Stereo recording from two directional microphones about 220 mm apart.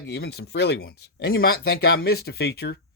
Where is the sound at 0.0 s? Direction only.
50° left (ahead or behind).